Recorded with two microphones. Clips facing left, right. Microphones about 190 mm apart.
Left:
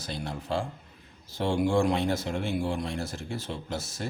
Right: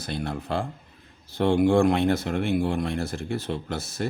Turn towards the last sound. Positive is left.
turn(degrees=-60)  # may be behind; listen again after turning